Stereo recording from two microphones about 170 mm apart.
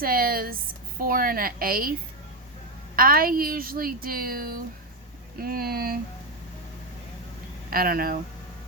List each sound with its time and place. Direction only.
0.0 s a woman's voice: 60° right (ahead or behind)
7.7 s a woman's voice: 60° right (ahead or behind)